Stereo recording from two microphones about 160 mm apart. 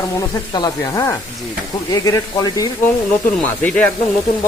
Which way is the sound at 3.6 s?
10° left (ahead or behind).